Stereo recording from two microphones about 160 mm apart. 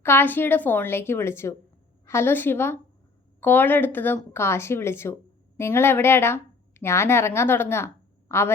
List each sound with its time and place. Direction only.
0.0 s a woman's voice: 15° left (ahead or behind)